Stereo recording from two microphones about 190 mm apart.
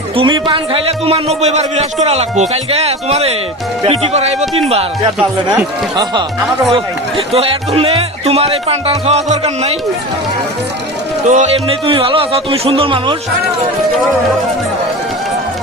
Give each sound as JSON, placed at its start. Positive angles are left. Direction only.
{"t": 0.2, "sound": "a man's voice", "side_deg": -25}
{"t": 5.5, "sound": "speech", "side_deg": -20}
{"t": 7.3, "sound": "a man's voice", "side_deg": -30}
{"t": 11.3, "sound": "speech", "side_deg": -35}